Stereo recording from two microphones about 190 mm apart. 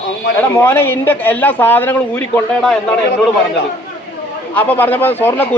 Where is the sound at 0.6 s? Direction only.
10° left (ahead or behind).